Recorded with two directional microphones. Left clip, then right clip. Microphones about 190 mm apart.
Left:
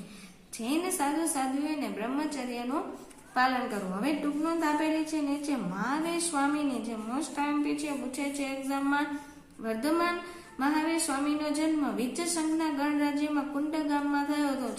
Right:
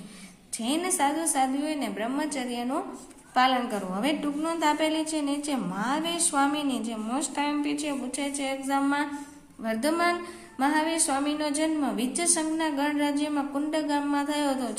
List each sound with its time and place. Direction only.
0.6 s a woman's voice: 40° right (ahead or behind)
3.9 s a woman's voice: 40° right (ahead or behind)